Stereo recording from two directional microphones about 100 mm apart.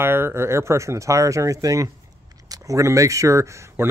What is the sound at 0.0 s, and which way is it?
Speech, 25° right (ahead or behind).